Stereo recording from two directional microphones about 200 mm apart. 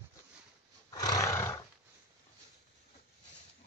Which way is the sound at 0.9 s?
20° left (ahead or behind).